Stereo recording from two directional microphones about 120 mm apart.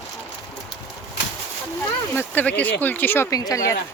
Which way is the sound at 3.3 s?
25° left (ahead or behind).